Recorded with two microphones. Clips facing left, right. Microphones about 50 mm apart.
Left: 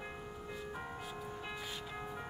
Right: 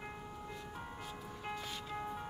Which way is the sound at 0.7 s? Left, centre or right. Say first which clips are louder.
Left 3 dB; left.